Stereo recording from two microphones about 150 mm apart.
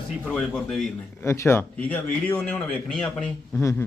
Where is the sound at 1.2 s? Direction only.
15° left (ahead or behind).